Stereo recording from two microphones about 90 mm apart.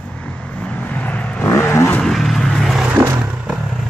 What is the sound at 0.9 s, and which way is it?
Vehicle, 20° left (ahead or behind).